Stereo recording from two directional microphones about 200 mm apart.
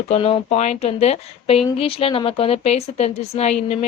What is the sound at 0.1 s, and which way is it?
A woman's voice, 30° left (ahead or behind).